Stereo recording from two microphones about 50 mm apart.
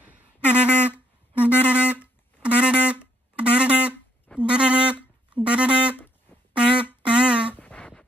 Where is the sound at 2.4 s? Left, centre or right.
Right.